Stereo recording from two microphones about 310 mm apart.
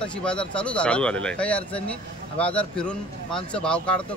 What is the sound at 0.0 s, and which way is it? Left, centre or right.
Speech, centre.